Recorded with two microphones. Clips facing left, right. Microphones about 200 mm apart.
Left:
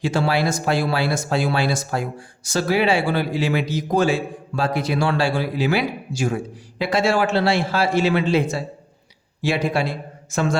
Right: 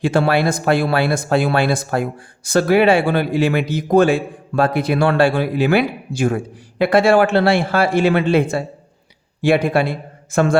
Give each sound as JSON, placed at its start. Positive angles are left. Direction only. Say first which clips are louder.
{"t": 0.0, "sound": "speech", "louder": "right 4 dB", "side_deg": -55}